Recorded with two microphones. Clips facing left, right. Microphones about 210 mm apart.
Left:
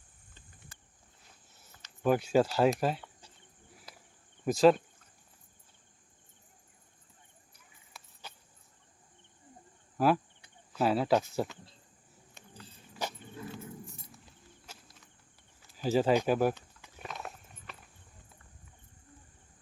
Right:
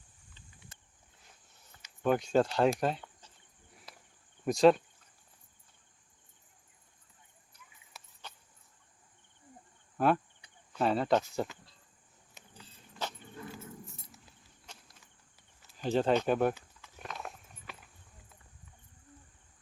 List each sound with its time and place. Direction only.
2.0 s speech: 5° left (ahead or behind)
3.9 s cricket: centre (ahead or behind)
4.4 s speech: centre (ahead or behind)
8.2 s a sound: 5° left (ahead or behind)
10.7 s speech: 5° left (ahead or behind)
12.9 s keys jangling: 5° left (ahead or behind)
13.5 s walk: 5° right (ahead or behind)
15.8 s speech: 5° left (ahead or behind)
17.0 s horse: centre (ahead or behind)